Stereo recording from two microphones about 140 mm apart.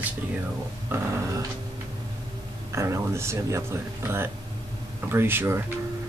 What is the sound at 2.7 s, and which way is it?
Speech, 20° right (ahead or behind).